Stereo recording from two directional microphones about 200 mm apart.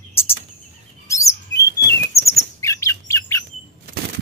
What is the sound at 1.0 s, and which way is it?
Chirp, 15° left (ahead or behind).